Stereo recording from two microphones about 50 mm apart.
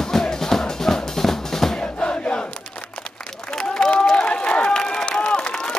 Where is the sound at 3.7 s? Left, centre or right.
Centre.